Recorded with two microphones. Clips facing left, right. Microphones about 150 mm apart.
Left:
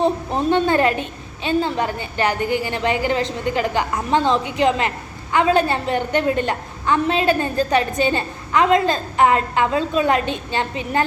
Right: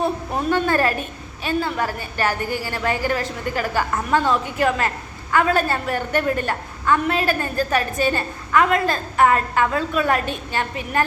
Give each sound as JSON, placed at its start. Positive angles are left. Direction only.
{"t": 0.0, "sound": "a woman's voice", "side_deg": 25}